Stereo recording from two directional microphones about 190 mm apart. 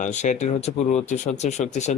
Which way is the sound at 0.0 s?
40° left (ahead or behind).